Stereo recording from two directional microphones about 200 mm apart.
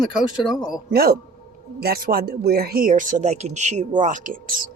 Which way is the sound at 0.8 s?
50° right (ahead or behind).